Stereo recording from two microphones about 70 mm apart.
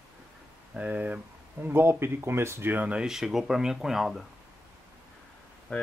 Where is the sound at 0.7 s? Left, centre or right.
Right.